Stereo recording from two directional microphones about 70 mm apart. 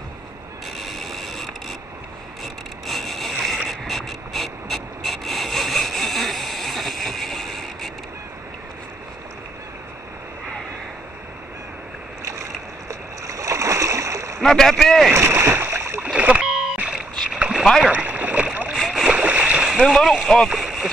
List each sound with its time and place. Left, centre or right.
0.7 s mechanisms: centre
2.4 s boat: centre
12.8 s a sound: right
14.4 s speech: centre
15.2 s splash: right
16.0 s rowboat: centre
16.4 s rowboat: centre
16.7 s rowboat: centre
17.6 s speech: centre
17.9 s rowboat: right
18.7 s boat: centre
19.0 s splash: centre
19.9 s speech: centre